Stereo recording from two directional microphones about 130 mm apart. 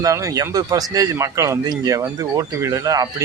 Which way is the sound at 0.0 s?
25° right (ahead or behind).